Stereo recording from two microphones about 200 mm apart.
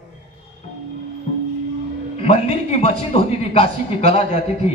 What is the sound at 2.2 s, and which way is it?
A man's voice, 30° left (ahead or behind).